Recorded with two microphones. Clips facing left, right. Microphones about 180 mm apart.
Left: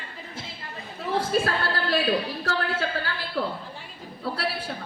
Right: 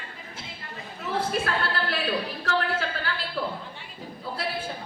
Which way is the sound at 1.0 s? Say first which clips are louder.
Left 3 dB; 30° left (ahead or behind).